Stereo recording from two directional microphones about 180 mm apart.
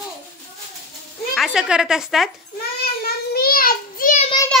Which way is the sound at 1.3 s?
Centre (ahead or behind).